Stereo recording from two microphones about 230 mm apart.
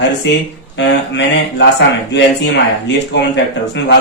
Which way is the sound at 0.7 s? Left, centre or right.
Left.